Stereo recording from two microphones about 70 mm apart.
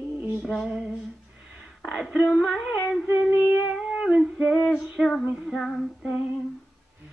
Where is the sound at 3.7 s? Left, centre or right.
Centre.